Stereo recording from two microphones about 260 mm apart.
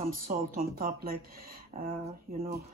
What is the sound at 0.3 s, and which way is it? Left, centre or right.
Speech, right.